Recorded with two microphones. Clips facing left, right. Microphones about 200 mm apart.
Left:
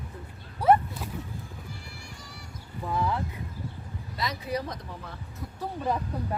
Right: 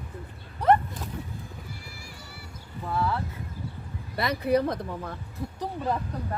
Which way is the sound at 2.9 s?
15° left (ahead or behind).